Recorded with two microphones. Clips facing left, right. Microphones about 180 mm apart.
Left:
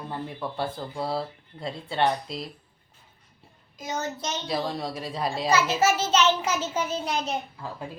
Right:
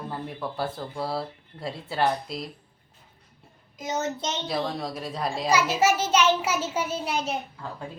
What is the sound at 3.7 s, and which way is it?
Speech, 20° right (ahead or behind).